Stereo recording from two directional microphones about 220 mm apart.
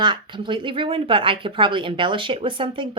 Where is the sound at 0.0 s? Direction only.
20° right (ahead or behind).